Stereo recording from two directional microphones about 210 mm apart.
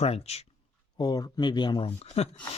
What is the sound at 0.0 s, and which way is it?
Speech, 30° left (ahead or behind).